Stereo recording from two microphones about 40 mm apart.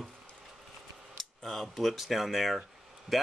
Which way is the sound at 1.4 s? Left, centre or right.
Centre.